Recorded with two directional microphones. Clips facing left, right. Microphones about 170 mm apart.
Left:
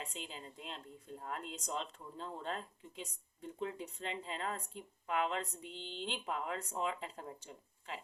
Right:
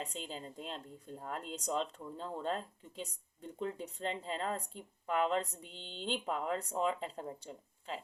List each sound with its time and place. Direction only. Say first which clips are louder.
0.0 s speech: right 4 dB; 35° right (ahead or behind)